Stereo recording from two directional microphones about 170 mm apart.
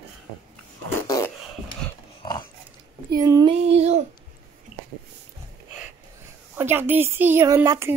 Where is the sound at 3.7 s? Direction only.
40° right (ahead or behind).